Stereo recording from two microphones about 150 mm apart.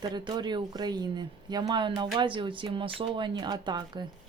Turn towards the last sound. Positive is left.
turn(degrees=-30)  # may be behind; listen again after turning